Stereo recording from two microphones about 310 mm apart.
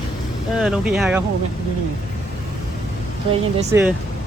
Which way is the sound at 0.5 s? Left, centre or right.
Centre.